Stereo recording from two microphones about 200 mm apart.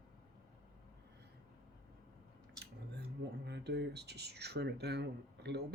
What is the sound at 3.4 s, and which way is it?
Speech, 55° right (ahead or behind).